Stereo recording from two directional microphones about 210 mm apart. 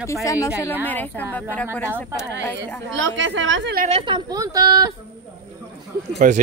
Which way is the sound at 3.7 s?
35° right (ahead or behind).